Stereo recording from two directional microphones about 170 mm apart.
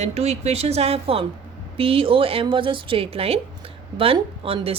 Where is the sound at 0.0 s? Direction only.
40° right (ahead or behind).